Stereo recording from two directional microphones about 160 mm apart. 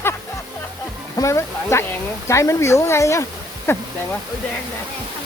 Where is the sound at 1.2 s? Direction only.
15° left (ahead or behind).